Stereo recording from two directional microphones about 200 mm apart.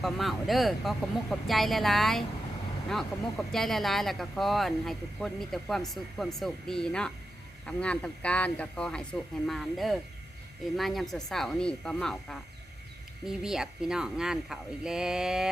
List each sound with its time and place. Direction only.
0.0 s speech: centre (ahead or behind)